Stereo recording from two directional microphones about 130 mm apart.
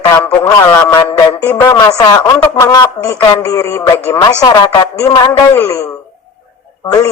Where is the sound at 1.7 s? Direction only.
30° left (ahead or behind).